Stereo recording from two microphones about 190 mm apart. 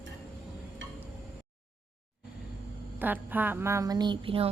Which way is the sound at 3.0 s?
10° right (ahead or behind).